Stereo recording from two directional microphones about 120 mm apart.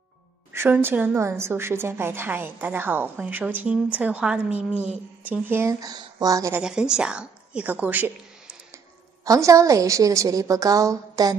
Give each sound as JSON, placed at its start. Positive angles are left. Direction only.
{"t": 0.5, "sound": "a woman's voice", "side_deg": -20}
{"t": 6.6, "sound": "a woman's voice", "side_deg": -5}
{"t": 9.2, "sound": "a woman's voice", "side_deg": -30}